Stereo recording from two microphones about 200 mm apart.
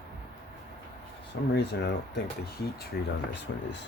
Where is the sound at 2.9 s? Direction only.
50° left (ahead or behind).